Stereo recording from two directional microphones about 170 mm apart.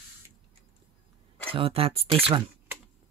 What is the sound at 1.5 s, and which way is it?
Speech, 35° right (ahead or behind).